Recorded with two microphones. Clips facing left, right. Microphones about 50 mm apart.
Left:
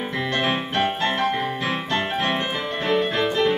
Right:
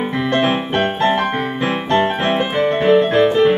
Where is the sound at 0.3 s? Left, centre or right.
Right.